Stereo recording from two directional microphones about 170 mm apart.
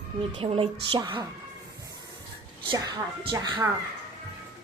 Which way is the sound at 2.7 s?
25° right (ahead or behind).